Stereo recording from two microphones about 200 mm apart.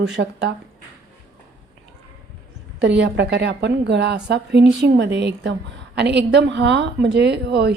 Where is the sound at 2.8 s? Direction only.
60° right (ahead or behind).